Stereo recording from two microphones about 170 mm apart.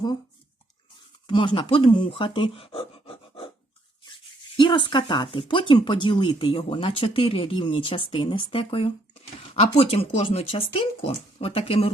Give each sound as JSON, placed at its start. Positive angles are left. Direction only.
{"t": 1.3, "sound": "speech", "side_deg": 30}
{"t": 4.5, "sound": "speech", "side_deg": 30}